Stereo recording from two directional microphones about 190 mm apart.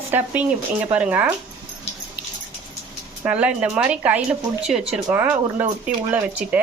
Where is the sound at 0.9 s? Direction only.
10° right (ahead or behind).